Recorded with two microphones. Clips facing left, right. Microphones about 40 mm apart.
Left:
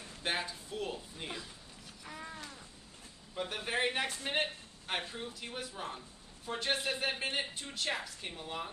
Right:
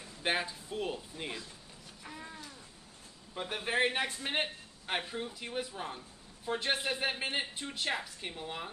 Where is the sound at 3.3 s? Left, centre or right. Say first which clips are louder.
Right 2 dB; centre.